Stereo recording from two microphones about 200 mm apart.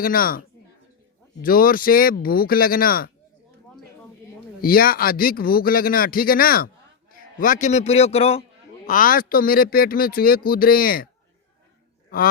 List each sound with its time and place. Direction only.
0.0 s speech: 45° left (ahead or behind)
4.6 s a man's voice: 45° left (ahead or behind); by 8.4 s 30° left (ahead or behind)
8.9 s speech: 45° left (ahead or behind)